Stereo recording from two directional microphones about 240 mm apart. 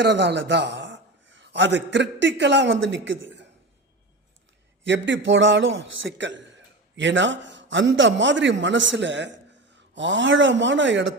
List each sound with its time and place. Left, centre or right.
0.0 s a man's voice: right
4.9 s a man's voice: right